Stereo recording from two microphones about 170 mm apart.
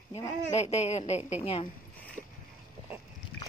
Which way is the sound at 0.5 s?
40° left (ahead or behind).